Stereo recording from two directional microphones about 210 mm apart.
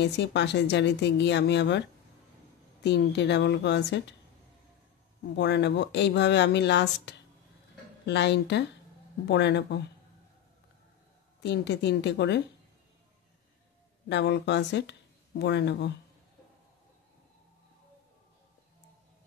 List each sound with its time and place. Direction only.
0.0 s speech: 55° left (ahead or behind)
5.3 s speech: 55° left (ahead or behind)
11.4 s speech: 55° left (ahead or behind)
14.0 s speech: 55° left (ahead or behind)